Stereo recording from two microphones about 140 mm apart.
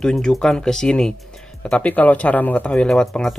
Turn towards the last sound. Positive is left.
turn(degrees=5)  # may be behind; listen again after turning